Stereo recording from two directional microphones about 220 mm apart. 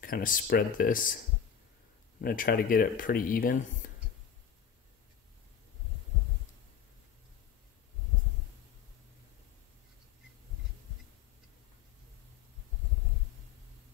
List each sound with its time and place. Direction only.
0.0 s speech: 40° left (ahead or behind)
2.2 s speech: 40° left (ahead or behind)